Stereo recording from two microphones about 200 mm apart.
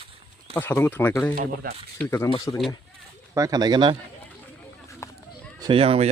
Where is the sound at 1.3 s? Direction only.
45° right (ahead or behind).